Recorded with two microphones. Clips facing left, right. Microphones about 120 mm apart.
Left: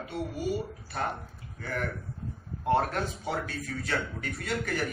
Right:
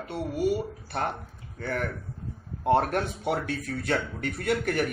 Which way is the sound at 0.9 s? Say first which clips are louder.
Right 2 dB; 65° right (ahead or behind).